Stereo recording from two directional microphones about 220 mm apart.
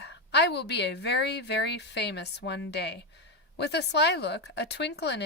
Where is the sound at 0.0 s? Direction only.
50° left (ahead or behind).